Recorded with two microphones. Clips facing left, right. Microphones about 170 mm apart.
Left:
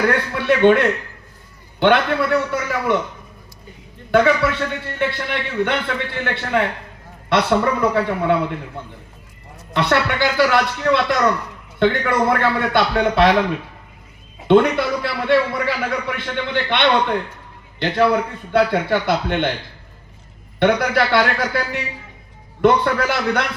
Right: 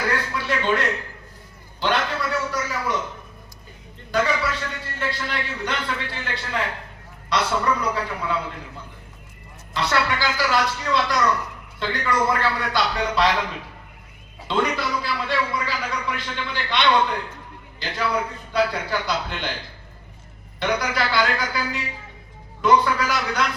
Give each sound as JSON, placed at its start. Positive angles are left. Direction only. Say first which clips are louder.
{"t": 0.1, "sound": "a man's voice", "louder": "left 7 dB", "side_deg": 65}
{"t": 4.1, "sound": "a man's voice", "louder": "left 7 dB", "side_deg": 65}
{"t": 14.4, "sound": "a man's voice", "louder": "left 10 dB", "side_deg": 60}
{"t": 20.6, "sound": "a man's voice", "louder": "left 7 dB", "side_deg": 60}